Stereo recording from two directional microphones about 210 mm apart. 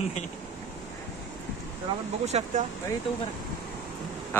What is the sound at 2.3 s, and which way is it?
Speech, 30° right (ahead or behind).